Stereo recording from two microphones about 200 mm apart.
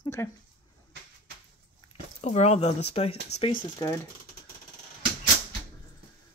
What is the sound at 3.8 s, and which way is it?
Speech, 20° left (ahead or behind).